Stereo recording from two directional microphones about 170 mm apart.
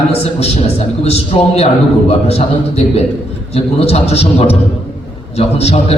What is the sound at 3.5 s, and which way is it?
A man's voice, 35° left (ahead or behind).